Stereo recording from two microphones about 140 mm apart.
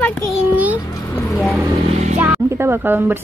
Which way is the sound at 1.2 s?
Centre (ahead or behind).